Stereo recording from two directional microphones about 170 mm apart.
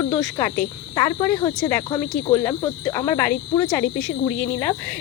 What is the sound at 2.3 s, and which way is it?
Speech, 15° left (ahead or behind).